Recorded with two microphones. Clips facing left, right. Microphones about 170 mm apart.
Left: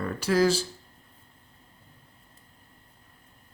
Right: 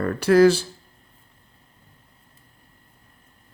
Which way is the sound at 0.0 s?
60° right (ahead or behind).